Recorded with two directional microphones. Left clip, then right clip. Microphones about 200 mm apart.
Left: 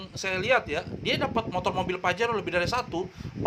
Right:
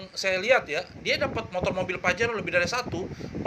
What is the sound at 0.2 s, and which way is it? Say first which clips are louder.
A man's voice: right 2 dB; 25° left (ahead or behind).